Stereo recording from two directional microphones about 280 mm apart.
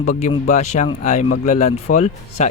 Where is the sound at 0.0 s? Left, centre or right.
Left.